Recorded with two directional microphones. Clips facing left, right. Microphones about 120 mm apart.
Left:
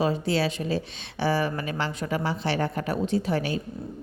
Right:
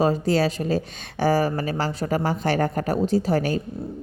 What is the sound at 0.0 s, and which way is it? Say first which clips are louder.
A woman's voice: right 4 dB; 40° right (ahead or behind).